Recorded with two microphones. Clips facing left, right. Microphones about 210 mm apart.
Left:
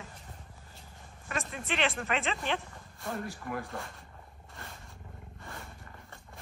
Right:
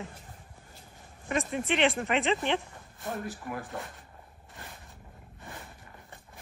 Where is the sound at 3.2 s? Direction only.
Centre (ahead or behind).